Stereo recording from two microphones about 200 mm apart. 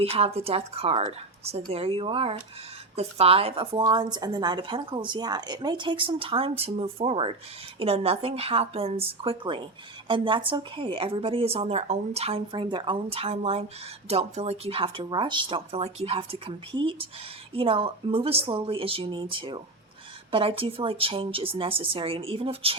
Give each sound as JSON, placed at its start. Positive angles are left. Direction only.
{"t": 0.0, "sound": "speech", "side_deg": -30}